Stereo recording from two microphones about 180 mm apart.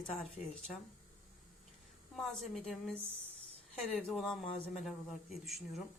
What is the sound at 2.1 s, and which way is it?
A woman's voice, centre (ahead or behind).